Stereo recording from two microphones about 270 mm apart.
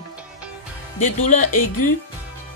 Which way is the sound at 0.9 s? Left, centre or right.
Left.